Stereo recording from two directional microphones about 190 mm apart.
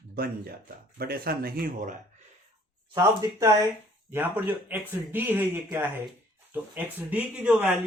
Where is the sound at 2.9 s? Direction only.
15° right (ahead or behind).